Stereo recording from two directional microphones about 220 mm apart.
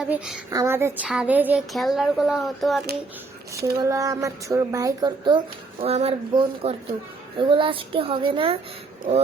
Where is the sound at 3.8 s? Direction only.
15° right (ahead or behind).